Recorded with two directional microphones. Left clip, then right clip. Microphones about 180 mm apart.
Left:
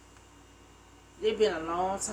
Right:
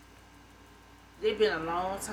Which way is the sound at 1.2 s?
15° left (ahead or behind).